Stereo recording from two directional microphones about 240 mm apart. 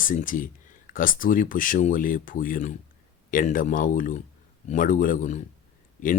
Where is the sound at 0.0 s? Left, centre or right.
Left.